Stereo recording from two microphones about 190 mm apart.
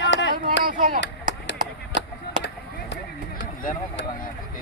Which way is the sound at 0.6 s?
45° right (ahead or behind).